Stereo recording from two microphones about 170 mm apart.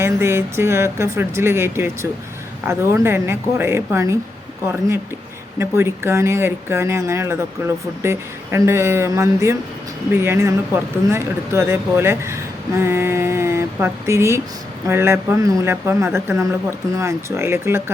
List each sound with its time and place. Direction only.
0.0 s speech: 15° right (ahead or behind)
5.5 s speech: 15° right (ahead or behind)